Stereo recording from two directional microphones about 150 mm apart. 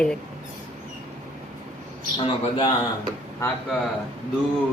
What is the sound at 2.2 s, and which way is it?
Speech, 35° left (ahead or behind).